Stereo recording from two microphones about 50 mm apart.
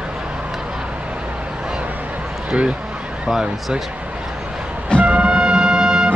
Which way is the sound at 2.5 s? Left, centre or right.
Centre.